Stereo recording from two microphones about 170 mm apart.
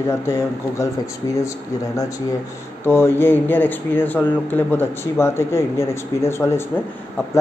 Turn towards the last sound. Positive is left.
turn(degrees=15)  # may be behind; listen again after turning